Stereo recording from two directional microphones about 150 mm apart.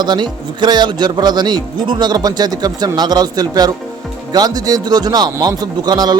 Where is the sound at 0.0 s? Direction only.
30° right (ahead or behind).